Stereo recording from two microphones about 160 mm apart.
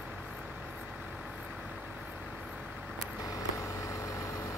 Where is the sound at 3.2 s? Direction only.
20° left (ahead or behind).